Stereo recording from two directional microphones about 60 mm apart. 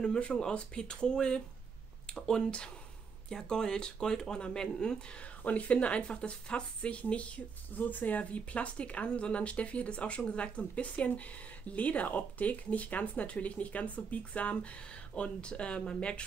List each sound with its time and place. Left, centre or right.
0.0 s speech: centre